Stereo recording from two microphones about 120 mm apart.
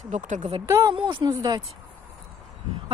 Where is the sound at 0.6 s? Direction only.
25° right (ahead or behind).